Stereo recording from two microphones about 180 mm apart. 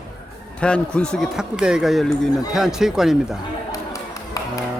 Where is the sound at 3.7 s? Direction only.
20° left (ahead or behind).